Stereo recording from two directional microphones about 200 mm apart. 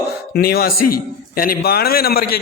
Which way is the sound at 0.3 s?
50° left (ahead or behind).